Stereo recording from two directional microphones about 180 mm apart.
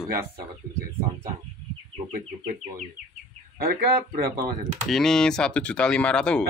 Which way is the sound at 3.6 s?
60° right (ahead or behind).